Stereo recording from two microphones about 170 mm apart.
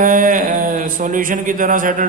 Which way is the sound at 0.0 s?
50° right (ahead or behind).